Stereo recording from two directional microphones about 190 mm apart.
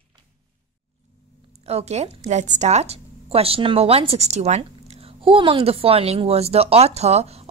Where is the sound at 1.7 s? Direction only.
35° right (ahead or behind).